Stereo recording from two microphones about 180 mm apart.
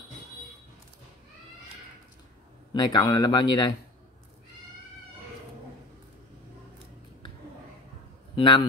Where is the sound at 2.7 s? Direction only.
20° left (ahead or behind).